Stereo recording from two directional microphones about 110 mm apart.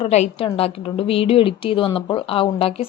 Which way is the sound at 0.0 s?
75° left (ahead or behind).